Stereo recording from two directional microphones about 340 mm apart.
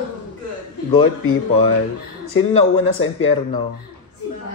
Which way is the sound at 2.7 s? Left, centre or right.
Left.